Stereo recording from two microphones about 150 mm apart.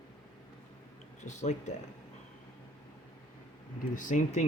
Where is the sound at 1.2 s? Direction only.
50° left (ahead or behind).